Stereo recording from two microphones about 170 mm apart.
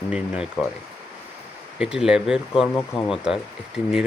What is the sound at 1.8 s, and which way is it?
Speech, 5° right (ahead or behind).